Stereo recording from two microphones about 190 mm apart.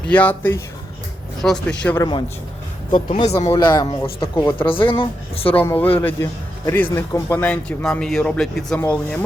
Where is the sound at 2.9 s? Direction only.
30° left (ahead or behind).